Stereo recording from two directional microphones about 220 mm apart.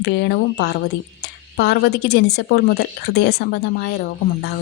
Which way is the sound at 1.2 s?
50° left (ahead or behind).